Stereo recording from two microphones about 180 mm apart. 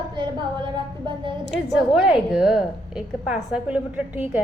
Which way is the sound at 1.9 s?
5° right (ahead or behind).